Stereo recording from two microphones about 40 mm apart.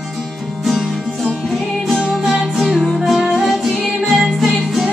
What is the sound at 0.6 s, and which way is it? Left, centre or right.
Music, centre.